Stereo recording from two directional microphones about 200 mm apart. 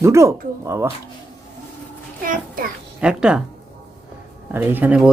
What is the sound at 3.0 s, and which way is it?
Speech, 5° right (ahead or behind).